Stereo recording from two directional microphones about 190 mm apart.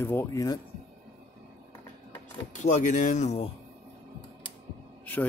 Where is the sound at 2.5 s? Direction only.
40° left (ahead or behind).